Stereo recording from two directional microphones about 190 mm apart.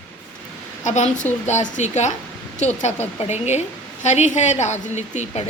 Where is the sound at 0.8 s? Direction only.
40° left (ahead or behind).